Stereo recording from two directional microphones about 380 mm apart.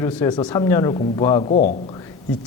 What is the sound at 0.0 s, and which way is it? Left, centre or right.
A man's voice, centre.